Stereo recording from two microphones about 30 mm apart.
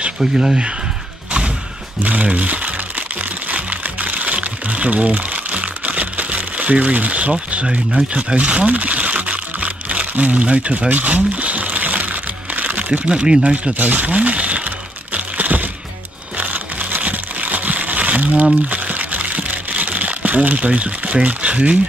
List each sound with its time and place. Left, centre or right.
0.2 s speech: centre
2.3 s speech: right
3.5 s music: right
7.6 s speech: right
8.4 s music: right
10.4 s speech: right
10.9 s music: right
13.1 s speech: right
13.7 s speech: right
15.1 s crack: right
16.3 s crumpling: right
17.0 s crumpling: right